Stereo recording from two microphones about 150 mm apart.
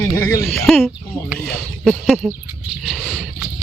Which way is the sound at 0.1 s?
10° left (ahead or behind).